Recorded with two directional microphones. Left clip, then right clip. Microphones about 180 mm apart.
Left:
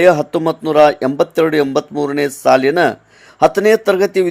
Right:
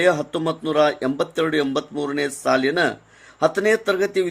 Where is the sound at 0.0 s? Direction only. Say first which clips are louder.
Left 8 dB; 35° left (ahead or behind).